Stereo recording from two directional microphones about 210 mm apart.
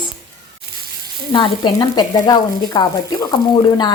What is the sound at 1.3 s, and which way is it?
A woman's voice, 20° left (ahead or behind).